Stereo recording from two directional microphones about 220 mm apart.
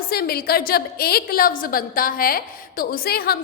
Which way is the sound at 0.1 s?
45° left (ahead or behind).